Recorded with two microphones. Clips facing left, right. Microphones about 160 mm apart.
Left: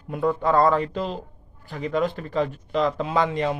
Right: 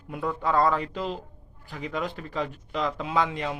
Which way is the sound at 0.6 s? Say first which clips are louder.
Left 4 dB; 10° right (ahead or behind).